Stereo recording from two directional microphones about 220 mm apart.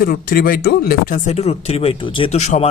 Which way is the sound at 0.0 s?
40° left (ahead or behind).